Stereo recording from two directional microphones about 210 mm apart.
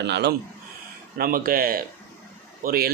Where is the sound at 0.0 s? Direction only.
55° right (ahead or behind).